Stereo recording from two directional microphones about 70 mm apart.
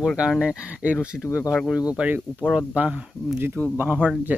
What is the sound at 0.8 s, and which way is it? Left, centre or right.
Speech, right.